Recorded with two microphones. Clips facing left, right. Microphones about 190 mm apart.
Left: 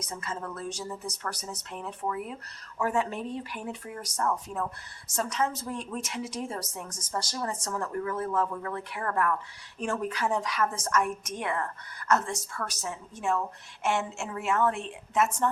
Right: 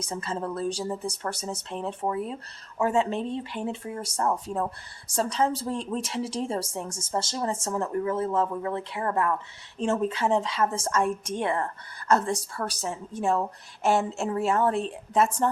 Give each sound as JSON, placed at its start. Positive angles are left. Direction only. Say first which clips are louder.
{"t": 0.0, "sound": "speech", "louder": "right 5 dB", "side_deg": -30}